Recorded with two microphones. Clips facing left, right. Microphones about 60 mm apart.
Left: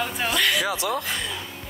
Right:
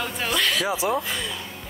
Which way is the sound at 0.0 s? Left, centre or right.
Centre.